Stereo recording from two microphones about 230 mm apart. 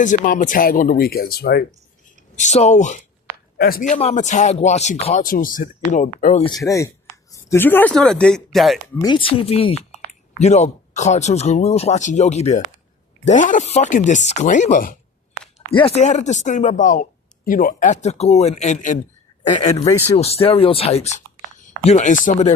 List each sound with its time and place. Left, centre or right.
0.0 s speech: left
2.4 s speech: left
6.4 s speech: centre
9.0 s speech: centre; by 14.9 s left
15.5 s speech: left